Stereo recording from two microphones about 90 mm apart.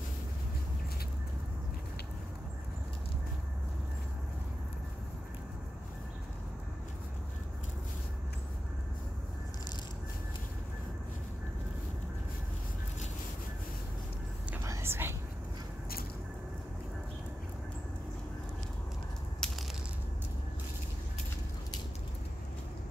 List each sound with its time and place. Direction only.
14.6 s whispering: 30° right (ahead or behind)
19.4 s crushing: 5° left (ahead or behind)